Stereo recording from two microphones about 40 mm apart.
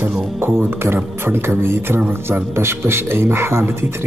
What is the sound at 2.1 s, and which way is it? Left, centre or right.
A man's voice, right.